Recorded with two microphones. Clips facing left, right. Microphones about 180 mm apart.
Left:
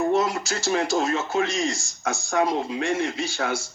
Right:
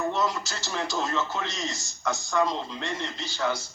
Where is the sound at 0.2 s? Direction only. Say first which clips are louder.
Left 4 dB; 70° left (ahead or behind).